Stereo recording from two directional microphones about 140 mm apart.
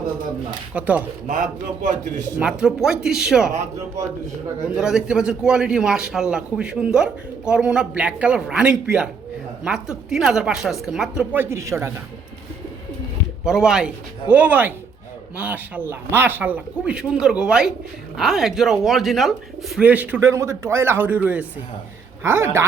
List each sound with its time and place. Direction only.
0.7 s speech: 10° right (ahead or behind)
1.3 s a man's voice: 65° right (ahead or behind)
2.4 s a man's voice: 5° right (ahead or behind)
4.7 s a man's voice: 5° right (ahead or behind); by 11.9 s 20° right (ahead or behind)
13.4 s speech: 5° right (ahead or behind)